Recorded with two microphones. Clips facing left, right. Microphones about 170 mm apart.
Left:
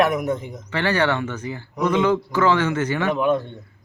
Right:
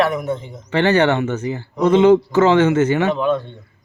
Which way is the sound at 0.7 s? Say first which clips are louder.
Right 6 dB; 25° right (ahead or behind).